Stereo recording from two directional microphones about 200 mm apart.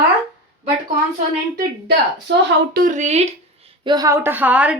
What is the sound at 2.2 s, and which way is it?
Speech, 60° right (ahead or behind).